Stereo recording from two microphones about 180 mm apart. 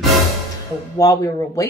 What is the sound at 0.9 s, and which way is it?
Speech, 20° left (ahead or behind).